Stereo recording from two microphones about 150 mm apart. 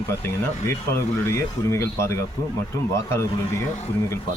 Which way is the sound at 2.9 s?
15° left (ahead or behind).